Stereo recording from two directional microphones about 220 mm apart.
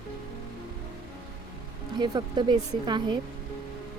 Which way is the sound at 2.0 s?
20° right (ahead or behind).